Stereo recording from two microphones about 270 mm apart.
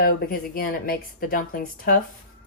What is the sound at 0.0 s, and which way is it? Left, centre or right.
Speech, left.